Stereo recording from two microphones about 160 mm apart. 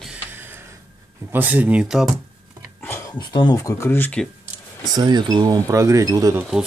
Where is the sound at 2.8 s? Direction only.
10° left (ahead or behind).